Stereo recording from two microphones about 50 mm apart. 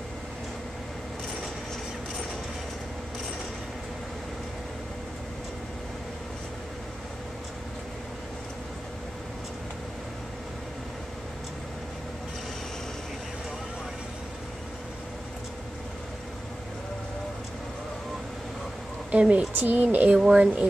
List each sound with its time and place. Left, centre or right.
19.1 s speech: right
20.2 s speech: right